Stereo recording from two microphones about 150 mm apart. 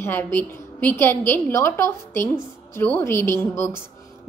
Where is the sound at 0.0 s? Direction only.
15° left (ahead or behind).